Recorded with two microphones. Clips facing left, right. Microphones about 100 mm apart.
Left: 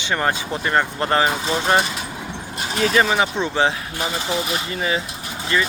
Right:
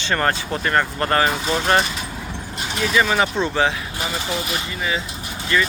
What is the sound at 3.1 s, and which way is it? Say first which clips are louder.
Speech: even; 15° left (ahead or behind).